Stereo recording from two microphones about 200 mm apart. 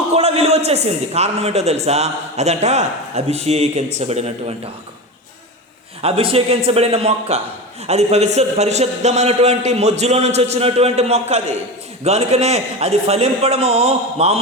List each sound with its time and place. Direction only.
0.1 s a man's voice: 30° right (ahead or behind)
6.0 s a man's voice: 30° right (ahead or behind)